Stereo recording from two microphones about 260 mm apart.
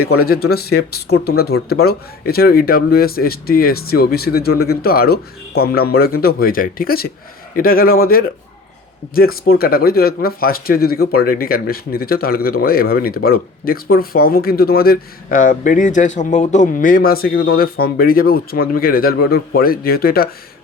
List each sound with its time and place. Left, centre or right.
0.0 s speech: left
1.0 s speech: left